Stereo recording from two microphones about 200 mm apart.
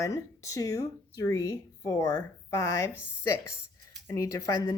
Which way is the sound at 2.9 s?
5° right (ahead or behind).